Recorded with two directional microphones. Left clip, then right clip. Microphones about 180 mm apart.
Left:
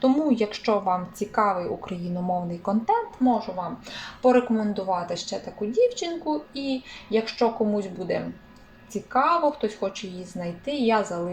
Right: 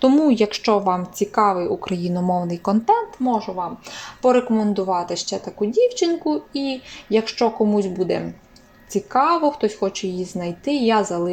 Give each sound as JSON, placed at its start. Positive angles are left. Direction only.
{"t": 0.0, "sound": "a woman's voice", "side_deg": -50}